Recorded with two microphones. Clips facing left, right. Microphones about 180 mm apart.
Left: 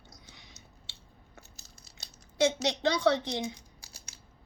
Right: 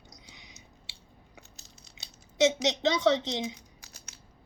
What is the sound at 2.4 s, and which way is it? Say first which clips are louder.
A woman's voice: right 2 dB; 20° right (ahead or behind).